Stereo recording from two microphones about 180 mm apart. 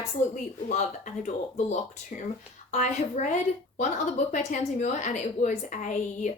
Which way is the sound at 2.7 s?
40° left (ahead or behind).